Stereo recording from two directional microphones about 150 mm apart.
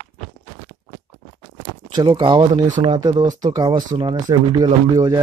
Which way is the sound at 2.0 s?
30° right (ahead or behind).